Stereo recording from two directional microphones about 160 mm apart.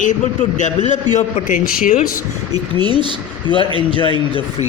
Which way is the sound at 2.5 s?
30° right (ahead or behind).